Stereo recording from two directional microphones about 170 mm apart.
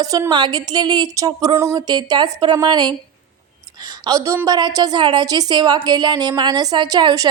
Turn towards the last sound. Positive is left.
turn(degrees=-25)  # may be behind; listen again after turning